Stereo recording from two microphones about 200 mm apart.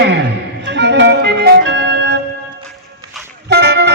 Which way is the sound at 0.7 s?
60° right (ahead or behind).